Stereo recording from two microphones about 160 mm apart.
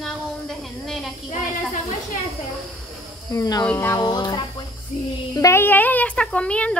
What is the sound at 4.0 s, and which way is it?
Speech, 25° left (ahead or behind).